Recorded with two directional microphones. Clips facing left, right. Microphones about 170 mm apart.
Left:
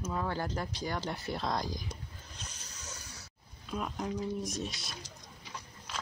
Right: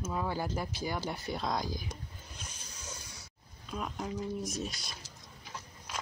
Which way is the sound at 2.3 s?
10° right (ahead or behind).